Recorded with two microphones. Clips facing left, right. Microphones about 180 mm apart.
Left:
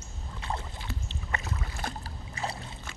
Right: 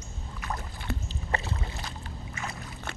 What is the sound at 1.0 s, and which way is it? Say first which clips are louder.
Rowboat: right 1 dB; 30° right (ahead or behind).